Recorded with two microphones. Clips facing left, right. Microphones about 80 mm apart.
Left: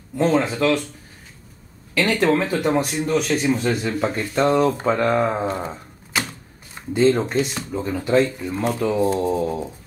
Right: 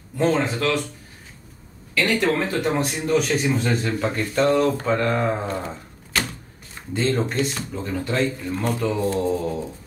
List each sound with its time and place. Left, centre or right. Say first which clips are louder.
0.2 s speech: left 2 dB; centre
2.2 s speech: left 3 dB; centre
4.4 s speech: left 1 dB; left
6.1 s typewriter: even; centre
6.9 s speech: left 5 dB; centre